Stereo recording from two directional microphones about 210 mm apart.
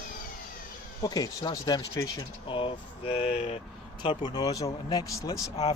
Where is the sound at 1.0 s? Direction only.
20° left (ahead or behind).